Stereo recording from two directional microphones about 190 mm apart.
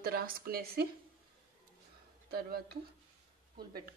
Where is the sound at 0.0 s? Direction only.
55° right (ahead or behind).